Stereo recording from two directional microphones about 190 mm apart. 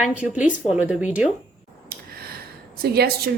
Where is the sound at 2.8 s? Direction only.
55° right (ahead or behind).